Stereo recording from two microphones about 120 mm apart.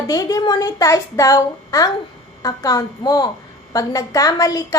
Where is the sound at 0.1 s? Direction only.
30° left (ahead or behind).